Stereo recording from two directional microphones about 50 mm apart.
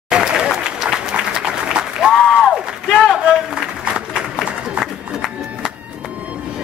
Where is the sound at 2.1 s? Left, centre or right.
Centre.